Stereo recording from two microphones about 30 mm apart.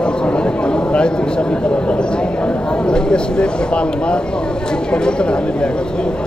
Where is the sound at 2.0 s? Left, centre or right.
Left.